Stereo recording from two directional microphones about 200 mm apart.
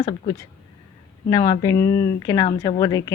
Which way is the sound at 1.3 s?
20° left (ahead or behind).